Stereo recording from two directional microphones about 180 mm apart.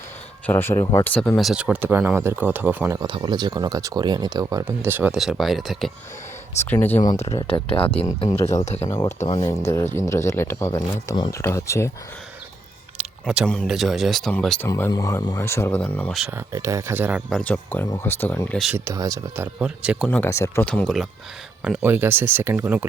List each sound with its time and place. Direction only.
0.4 s speech: 10° left (ahead or behind); by 3.0 s 10° right (ahead or behind)
3.0 s speech: 25° right (ahead or behind); by 5.9 s centre (ahead or behind)
6.7 s speech: 10° left (ahead or behind)
7.5 s speech: 30° left (ahead or behind)
8.9 s speech: 15° left (ahead or behind)
9.1 s speech: 35° left (ahead or behind)
9.5 s speech: 15° left (ahead or behind)
13.0 s a sound: 5° right (ahead or behind)
13.5 s speech: centre (ahead or behind)
14.7 s speech: 15° left (ahead or behind)
16.5 s speech: 15° right (ahead or behind); by 18.7 s 5° left (ahead or behind)
18.7 s speech: 15° right (ahead or behind)
19.5 s speech: 5° right (ahead or behind)
20.1 s speech: 10° left (ahead or behind); by 22.9 s 10° right (ahead or behind)